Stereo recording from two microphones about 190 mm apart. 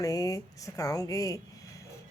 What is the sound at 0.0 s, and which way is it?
Speech, 20° left (ahead or behind).